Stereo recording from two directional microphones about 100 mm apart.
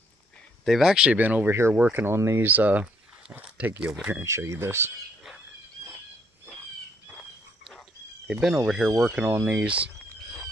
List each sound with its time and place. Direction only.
0.7 s speech: 5° right (ahead or behind); by 2.4 s 25° right (ahead or behind)
2.4 s speech: 15° right (ahead or behind)
8.3 s speech: 10° right (ahead or behind)
9.4 s speech: 15° right (ahead or behind)